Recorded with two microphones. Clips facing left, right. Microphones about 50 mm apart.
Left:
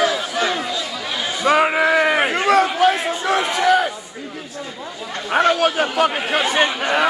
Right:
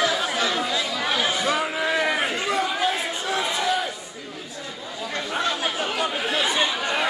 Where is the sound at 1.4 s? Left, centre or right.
Left.